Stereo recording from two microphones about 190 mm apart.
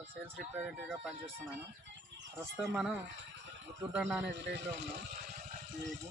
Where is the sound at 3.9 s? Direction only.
5° right (ahead or behind).